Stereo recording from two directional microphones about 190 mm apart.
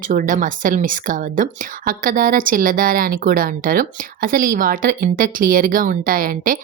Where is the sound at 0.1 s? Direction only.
45° right (ahead or behind).